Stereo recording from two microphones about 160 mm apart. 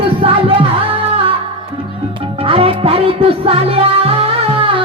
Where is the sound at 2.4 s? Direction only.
35° right (ahead or behind).